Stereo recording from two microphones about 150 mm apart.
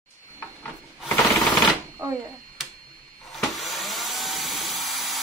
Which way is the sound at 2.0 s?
25° right (ahead or behind).